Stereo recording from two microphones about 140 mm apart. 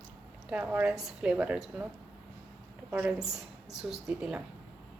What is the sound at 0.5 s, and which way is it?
A woman's voice, 10° right (ahead or behind).